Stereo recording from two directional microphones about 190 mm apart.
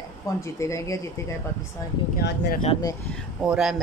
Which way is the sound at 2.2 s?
60° left (ahead or behind).